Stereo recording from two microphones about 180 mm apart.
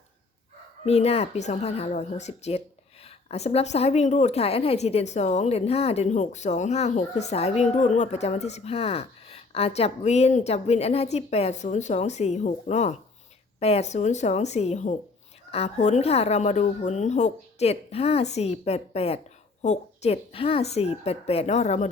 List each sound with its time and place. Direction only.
0.9 s speech: 35° left (ahead or behind)